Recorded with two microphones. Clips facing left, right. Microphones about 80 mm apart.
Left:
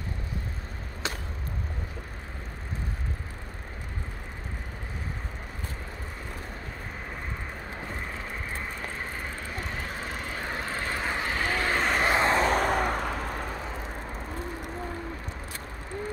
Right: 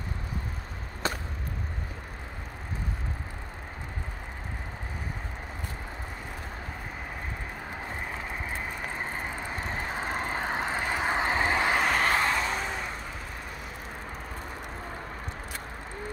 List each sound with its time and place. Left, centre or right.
1.0 s chop: right
8.9 s vehicle: right
11.7 s vehicle: centre
12.0 s vehicle: centre
12.4 s vehicle: left